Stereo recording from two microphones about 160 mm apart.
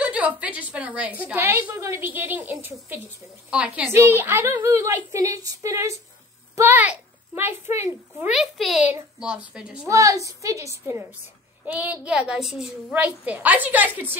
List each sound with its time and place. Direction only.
0.0 s a woman's voice: 10° right (ahead or behind)
8.3 s a child's voice: centre (ahead or behind)
9.8 s a woman's voice: 20° right (ahead or behind)